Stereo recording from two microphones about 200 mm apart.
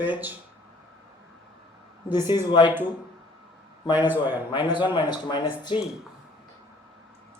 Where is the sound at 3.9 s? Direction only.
10° right (ahead or behind).